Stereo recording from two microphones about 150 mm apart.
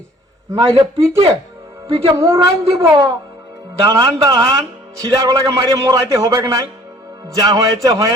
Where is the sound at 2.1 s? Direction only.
20° right (ahead or behind).